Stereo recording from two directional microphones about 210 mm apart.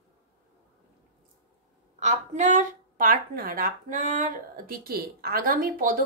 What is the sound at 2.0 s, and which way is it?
A woman's voice, 35° right (ahead or behind).